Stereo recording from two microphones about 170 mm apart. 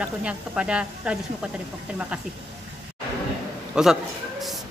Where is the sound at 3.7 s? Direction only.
5° right (ahead or behind).